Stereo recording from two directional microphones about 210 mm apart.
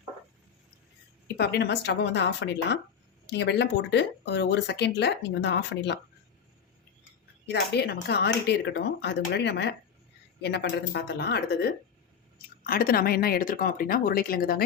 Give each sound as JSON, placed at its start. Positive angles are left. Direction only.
{"t": 1.4, "sound": "speech", "side_deg": 50}
{"t": 7.4, "sound": "speech", "side_deg": 50}